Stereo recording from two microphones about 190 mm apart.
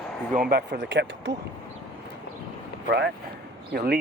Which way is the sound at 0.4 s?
60° right (ahead or behind).